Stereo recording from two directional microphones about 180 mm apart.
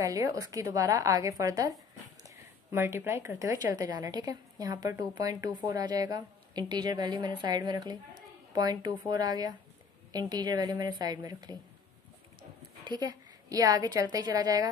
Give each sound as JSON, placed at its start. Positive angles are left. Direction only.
{"t": 0.0, "sound": "a woman's voice", "side_deg": -20}
{"t": 12.8, "sound": "a woman's voice", "side_deg": -25}